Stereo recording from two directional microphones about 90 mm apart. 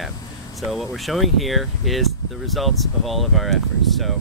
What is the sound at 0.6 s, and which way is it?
Speech, centre (ahead or behind).